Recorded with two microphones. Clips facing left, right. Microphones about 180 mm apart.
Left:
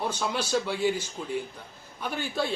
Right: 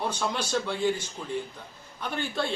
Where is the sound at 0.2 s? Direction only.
5° left (ahead or behind).